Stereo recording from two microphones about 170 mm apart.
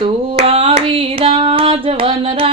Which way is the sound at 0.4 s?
35° right (ahead or behind).